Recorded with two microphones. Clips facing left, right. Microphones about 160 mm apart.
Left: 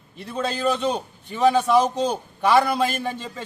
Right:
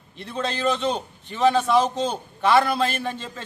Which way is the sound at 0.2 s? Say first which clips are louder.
Left 1 dB; 5° left (ahead or behind).